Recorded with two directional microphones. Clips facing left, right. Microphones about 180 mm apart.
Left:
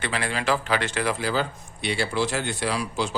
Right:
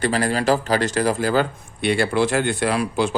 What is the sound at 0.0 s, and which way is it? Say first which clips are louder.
A man's voice: right 7 dB; 40° right (ahead or behind).